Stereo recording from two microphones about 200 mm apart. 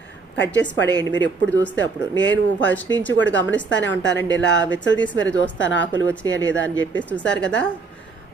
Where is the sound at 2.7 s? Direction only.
10° left (ahead or behind).